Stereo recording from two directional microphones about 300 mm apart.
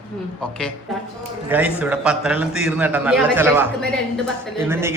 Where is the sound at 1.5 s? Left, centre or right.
Centre.